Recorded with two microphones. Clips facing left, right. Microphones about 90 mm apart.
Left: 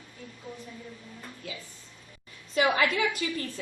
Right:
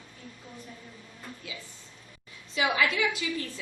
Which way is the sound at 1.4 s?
45° left (ahead or behind).